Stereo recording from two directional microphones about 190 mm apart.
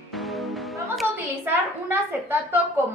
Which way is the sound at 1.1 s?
10° right (ahead or behind).